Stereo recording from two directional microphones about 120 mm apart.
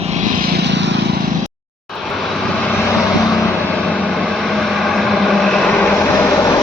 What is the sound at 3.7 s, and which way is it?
Vehicle, 5° left (ahead or behind).